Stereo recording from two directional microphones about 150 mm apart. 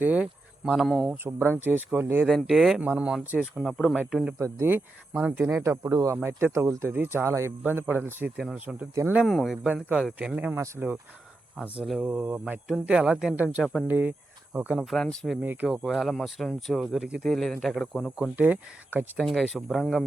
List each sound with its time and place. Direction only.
0.0 s speech: 10° right (ahead or behind)
1.1 s speech: 15° right (ahead or behind)
2.2 s speech: centre (ahead or behind)
4.4 s speech: 20° right (ahead or behind)
9.1 s speech: centre (ahead or behind)
14.8 s speech: 5° left (ahead or behind)
15.4 s speech: 5° right (ahead or behind)
18.3 s speech: 10° right (ahead or behind)
19.1 s speech: centre (ahead or behind)